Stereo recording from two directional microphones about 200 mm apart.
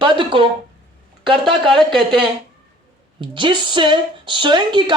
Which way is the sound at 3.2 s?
25° right (ahead or behind).